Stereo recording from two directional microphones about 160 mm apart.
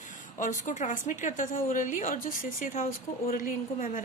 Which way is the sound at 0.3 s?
50° left (ahead or behind).